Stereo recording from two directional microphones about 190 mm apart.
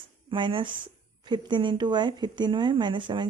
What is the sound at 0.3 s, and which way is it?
Speech, 25° right (ahead or behind).